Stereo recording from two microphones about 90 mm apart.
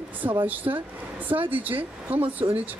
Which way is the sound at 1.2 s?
20° right (ahead or behind).